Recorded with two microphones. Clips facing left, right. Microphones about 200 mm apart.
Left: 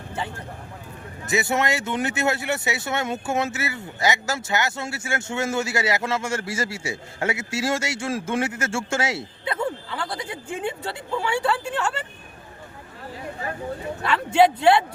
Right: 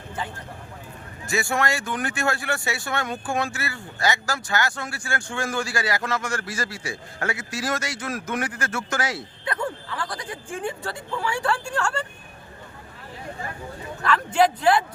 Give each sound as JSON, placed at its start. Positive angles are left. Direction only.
{"t": 1.3, "sound": "speech", "side_deg": 20}
{"t": 14.3, "sound": "speech", "side_deg": 25}